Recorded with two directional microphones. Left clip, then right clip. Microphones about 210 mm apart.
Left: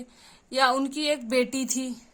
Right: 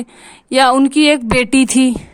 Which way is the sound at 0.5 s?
45° right (ahead or behind).